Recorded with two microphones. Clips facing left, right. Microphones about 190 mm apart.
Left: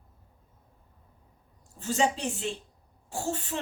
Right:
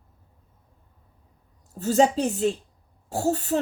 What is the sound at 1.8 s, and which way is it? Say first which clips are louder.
A woman's voice: right 8 dB; 40° right (ahead or behind).